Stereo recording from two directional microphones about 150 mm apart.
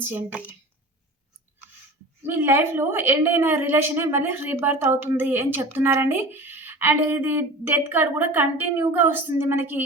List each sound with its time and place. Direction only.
0.0 s a woman's voice: 15° right (ahead or behind)
2.2 s a woman's voice: 15° right (ahead or behind)